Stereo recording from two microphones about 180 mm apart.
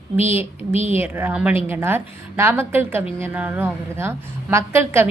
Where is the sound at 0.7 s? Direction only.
35° left (ahead or behind).